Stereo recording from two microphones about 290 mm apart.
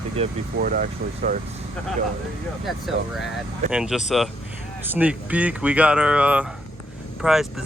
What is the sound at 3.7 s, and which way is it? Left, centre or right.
Speech, centre.